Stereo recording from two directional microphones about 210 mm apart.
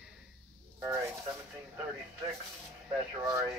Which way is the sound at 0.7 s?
15° right (ahead or behind).